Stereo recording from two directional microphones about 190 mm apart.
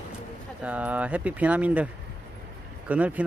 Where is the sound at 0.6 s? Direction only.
10° right (ahead or behind).